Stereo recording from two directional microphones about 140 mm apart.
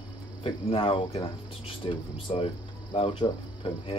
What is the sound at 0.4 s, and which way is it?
Speech, 40° left (ahead or behind).